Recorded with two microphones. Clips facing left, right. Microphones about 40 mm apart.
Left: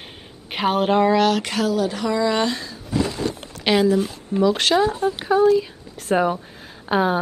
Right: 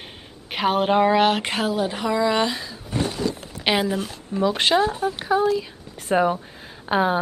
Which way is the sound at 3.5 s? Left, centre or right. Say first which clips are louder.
Left 4 dB; centre.